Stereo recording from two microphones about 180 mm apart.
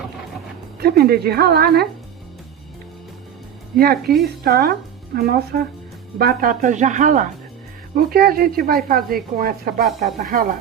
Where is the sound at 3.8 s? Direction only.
60° right (ahead or behind).